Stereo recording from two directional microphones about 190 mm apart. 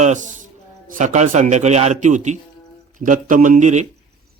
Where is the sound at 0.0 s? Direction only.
40° right (ahead or behind).